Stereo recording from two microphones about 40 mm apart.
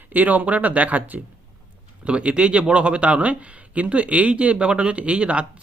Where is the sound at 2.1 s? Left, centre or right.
Right.